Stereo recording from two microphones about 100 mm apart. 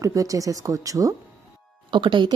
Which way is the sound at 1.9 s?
50° right (ahead or behind).